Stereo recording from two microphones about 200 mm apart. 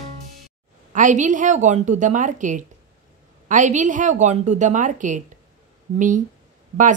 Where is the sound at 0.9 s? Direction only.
40° right (ahead or behind).